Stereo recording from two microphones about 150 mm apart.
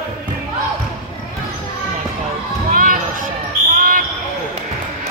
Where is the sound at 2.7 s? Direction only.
65° right (ahead or behind).